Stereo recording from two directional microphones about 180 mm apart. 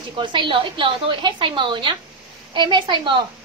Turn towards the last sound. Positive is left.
turn(degrees=-25)  # may be behind; listen again after turning